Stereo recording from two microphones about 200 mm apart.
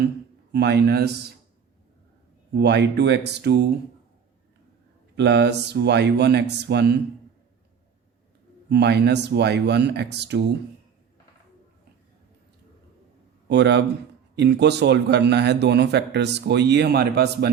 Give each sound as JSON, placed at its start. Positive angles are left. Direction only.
{"t": 0.5, "sound": "speech", "side_deg": -55}
{"t": 2.6, "sound": "speech", "side_deg": -55}
{"t": 5.1, "sound": "speech", "side_deg": -60}
{"t": 8.7, "sound": "speech", "side_deg": -55}
{"t": 13.5, "sound": "speech", "side_deg": -60}